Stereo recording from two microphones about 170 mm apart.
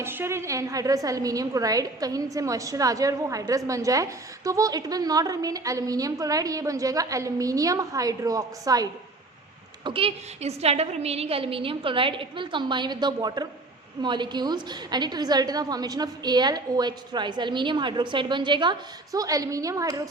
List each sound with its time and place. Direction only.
0.0 s a woman's voice: 15° right (ahead or behind)
9.8 s a woman's voice: 30° right (ahead or behind)